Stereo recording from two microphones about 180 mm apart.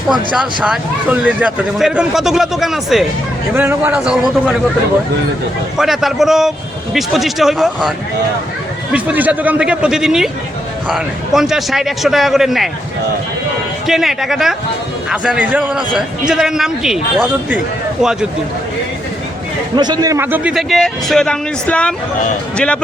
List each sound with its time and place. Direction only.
0.3 s speech: 5° right (ahead or behind)
3.5 s a man's voice: 10° right (ahead or behind)
5.7 s speech: centre (ahead or behind)
13.8 s speech: centre (ahead or behind)
19.7 s speech: 25° right (ahead or behind); by 22.8 s 5° left (ahead or behind)